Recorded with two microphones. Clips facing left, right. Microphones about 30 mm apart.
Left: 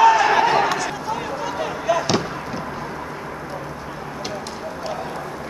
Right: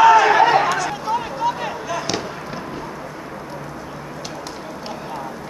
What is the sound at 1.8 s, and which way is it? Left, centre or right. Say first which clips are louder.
Basketball bounce: left 8 dB; centre.